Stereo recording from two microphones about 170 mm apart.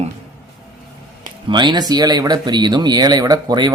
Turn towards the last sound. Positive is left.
turn(degrees=-25)  # may be behind; listen again after turning